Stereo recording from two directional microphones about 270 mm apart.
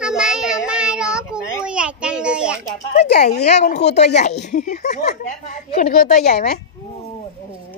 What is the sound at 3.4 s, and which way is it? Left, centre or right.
A woman's voice, left.